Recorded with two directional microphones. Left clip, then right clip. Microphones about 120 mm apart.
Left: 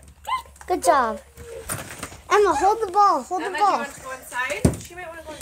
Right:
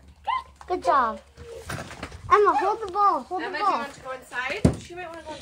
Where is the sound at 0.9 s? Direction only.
60° left (ahead or behind).